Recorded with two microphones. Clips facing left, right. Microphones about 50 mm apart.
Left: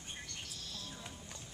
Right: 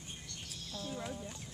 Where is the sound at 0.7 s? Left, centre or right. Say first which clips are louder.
Right 11 dB; right.